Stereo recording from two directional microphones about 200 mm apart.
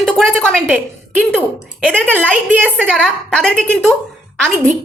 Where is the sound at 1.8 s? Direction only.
5° left (ahead or behind).